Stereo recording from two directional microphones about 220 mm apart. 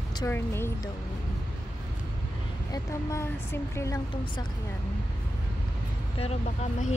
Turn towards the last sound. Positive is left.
turn(degrees=30)  # may be behind; listen again after turning